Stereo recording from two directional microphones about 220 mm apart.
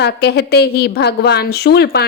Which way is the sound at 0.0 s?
45° left (ahead or behind).